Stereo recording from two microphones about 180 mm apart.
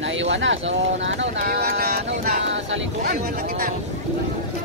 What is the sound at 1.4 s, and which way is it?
Speech, 60° right (ahead or behind).